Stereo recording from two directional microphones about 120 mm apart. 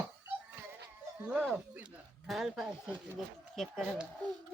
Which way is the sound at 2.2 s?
Centre (ahead or behind).